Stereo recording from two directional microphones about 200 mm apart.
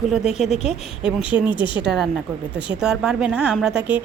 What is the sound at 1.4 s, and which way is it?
Speech, 25° left (ahead or behind).